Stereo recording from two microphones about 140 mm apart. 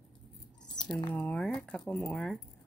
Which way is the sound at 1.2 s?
5° left (ahead or behind).